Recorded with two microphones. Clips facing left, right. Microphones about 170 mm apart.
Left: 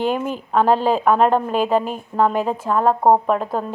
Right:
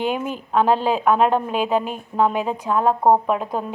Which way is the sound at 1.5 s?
40° left (ahead or behind).